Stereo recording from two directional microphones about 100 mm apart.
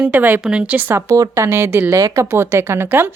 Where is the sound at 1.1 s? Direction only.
30° right (ahead or behind).